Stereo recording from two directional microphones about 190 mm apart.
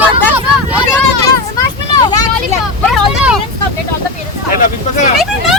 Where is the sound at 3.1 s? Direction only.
5° right (ahead or behind).